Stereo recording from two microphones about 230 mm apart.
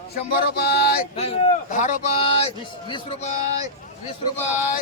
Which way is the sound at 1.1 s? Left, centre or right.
Left.